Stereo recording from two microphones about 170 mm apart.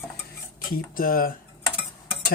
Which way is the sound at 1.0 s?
55° left (ahead or behind).